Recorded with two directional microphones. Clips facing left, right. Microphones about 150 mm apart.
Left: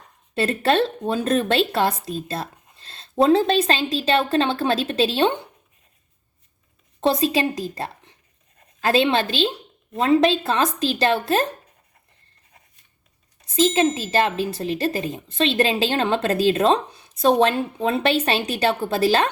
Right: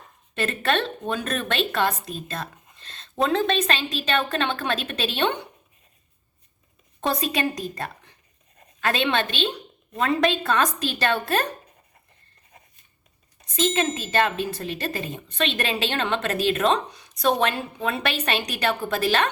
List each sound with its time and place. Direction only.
0.3 s a woman's voice: 35° left (ahead or behind)
7.0 s a woman's voice: 30° left (ahead or behind)
14.1 s a woman's voice: 30° left (ahead or behind)